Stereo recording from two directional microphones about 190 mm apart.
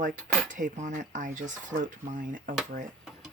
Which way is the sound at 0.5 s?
40° right (ahead or behind).